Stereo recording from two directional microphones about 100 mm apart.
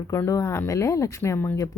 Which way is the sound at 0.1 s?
30° left (ahead or behind).